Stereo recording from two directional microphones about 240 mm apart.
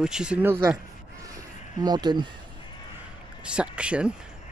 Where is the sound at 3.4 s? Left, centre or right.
Centre.